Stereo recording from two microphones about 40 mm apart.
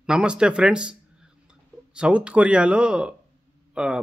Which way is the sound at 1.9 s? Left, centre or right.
Right.